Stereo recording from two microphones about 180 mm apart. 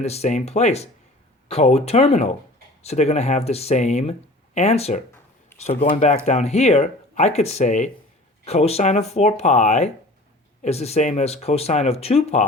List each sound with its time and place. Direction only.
0.0 s speech: 35° left (ahead or behind)